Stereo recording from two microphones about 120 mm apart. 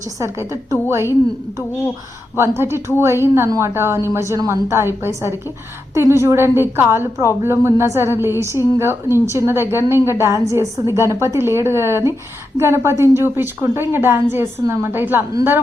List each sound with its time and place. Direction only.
0.2 s a woman's voice: 25° right (ahead or behind)
2.3 s a woman's voice: 20° right (ahead or behind)